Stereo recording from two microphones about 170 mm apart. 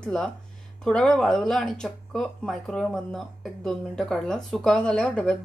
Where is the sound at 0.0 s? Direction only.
5° left (ahead or behind).